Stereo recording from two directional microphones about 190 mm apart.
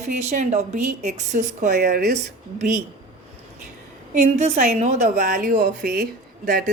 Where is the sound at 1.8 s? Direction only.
55° right (ahead or behind).